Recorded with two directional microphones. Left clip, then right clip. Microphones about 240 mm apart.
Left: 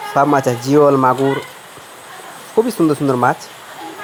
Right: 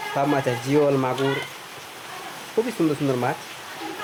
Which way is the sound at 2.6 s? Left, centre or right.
Left.